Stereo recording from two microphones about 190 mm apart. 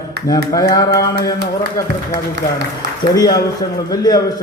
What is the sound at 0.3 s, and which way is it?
A man's voice, 20° left (ahead or behind).